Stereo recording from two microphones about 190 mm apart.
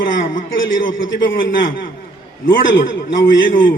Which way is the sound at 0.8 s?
85° left.